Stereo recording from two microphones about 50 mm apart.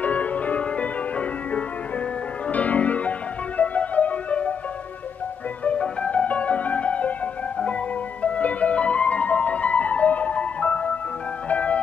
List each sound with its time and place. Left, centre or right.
0.0 s music: left
5.8 s music: left